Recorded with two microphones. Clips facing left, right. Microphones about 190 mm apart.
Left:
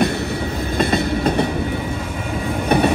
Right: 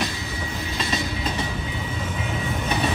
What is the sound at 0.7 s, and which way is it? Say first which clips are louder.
Train: left 10 dB; 60° left (ahead or behind).